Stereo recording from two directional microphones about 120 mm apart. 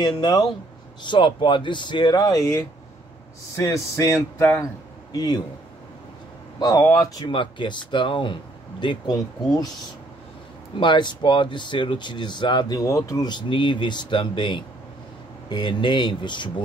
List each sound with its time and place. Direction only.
0.2 s speech: 35° left (ahead or behind)
5.1 s speech: 35° left (ahead or behind)
6.6 s speech: 30° left (ahead or behind)
7.2 s speech: 45° left (ahead or behind)
10.8 s speech: 40° left (ahead or behind)